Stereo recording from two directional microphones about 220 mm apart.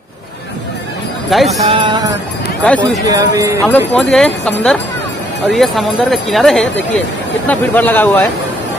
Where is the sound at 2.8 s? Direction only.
15° right (ahead or behind).